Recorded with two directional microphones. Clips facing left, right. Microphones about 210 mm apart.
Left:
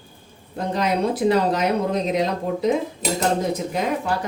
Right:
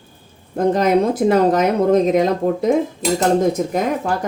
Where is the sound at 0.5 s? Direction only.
45° right (ahead or behind).